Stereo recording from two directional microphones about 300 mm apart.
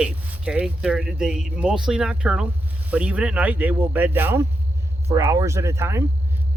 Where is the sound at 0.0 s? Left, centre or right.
Centre.